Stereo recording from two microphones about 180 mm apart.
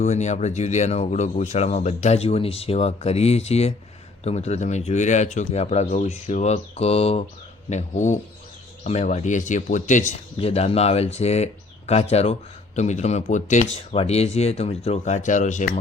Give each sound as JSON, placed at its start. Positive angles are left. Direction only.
{"t": 0.0, "sound": "speech", "side_deg": 40}